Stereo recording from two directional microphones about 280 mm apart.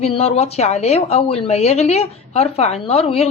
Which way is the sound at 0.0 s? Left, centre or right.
Left.